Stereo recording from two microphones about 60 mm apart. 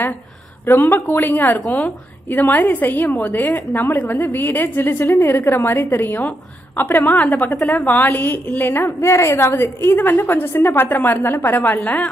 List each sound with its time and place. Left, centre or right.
0.7 s a woman's voice: left